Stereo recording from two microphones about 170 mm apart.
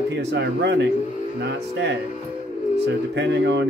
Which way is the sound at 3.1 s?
90° right.